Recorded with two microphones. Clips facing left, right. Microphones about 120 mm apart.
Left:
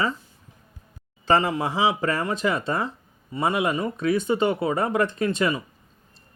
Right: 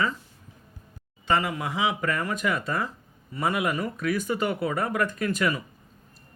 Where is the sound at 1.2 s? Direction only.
30° left (ahead or behind).